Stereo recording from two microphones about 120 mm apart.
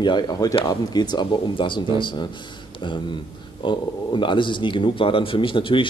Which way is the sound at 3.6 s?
40° left (ahead or behind).